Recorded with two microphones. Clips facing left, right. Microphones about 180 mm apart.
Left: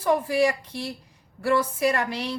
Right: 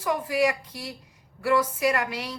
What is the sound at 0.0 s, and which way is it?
A woman's voice, 30° left (ahead or behind).